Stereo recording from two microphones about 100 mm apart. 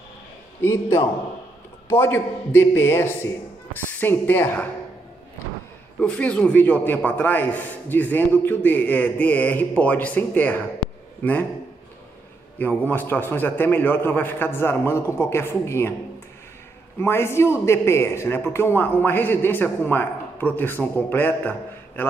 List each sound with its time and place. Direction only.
0.6 s a man's voice: 25° left (ahead or behind)
5.9 s a man's voice: 15° left (ahead or behind)
12.5 s a man's voice: 20° left (ahead or behind)
17.0 s a man's voice: 25° left (ahead or behind)